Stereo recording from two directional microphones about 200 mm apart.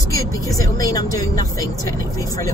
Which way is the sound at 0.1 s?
15° left (ahead or behind).